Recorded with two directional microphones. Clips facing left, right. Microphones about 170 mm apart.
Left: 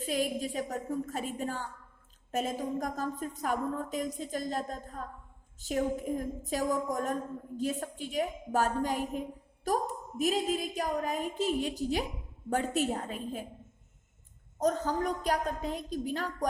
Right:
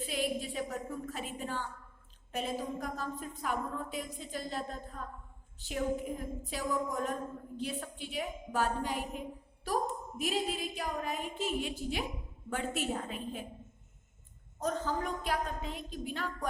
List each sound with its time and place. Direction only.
0.0 s a woman's voice: 40° left (ahead or behind)
14.6 s a woman's voice: 40° left (ahead or behind)